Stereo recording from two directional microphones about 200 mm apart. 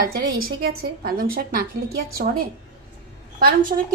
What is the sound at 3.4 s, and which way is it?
Speech, 45° right (ahead or behind).